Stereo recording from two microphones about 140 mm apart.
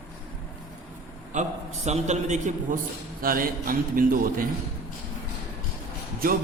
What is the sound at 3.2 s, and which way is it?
A man's voice, 85° right.